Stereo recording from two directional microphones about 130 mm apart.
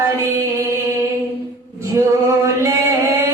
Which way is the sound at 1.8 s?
25° right (ahead or behind).